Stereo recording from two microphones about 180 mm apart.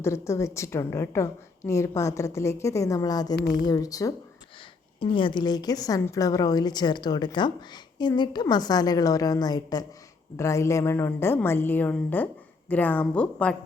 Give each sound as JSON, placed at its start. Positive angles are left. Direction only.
{"t": 0.0, "sound": "a woman's voice", "side_deg": 15}